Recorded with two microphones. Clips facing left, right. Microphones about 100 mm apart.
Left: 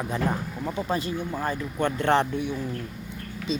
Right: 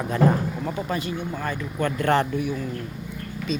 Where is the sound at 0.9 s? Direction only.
35° left (ahead or behind).